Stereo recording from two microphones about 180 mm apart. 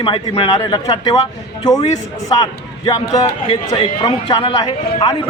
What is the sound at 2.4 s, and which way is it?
Speech, 20° left (ahead or behind).